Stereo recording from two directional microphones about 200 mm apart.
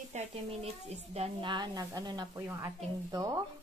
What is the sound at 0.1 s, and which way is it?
A woman's voice, 30° right (ahead or behind).